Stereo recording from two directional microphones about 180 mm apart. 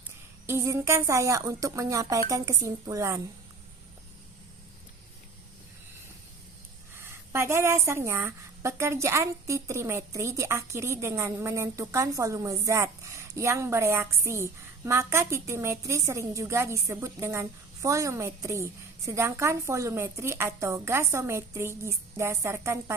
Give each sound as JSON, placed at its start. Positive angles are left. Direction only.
{"t": 0.4, "sound": "a woman's voice", "side_deg": -15}
{"t": 6.9, "sound": "a woman's voice", "side_deg": -15}